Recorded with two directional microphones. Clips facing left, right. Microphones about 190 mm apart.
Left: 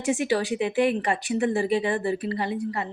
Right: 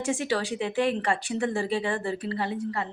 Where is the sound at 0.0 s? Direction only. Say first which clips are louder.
Left 3 dB; 15° left (ahead or behind).